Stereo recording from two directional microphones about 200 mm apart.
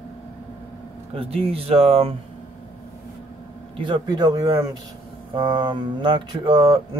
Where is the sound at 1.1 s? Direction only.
30° right (ahead or behind).